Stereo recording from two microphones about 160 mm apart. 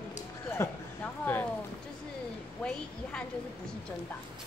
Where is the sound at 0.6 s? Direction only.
15° left (ahead or behind).